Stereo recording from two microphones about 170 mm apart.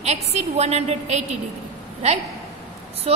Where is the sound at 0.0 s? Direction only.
40° right (ahead or behind).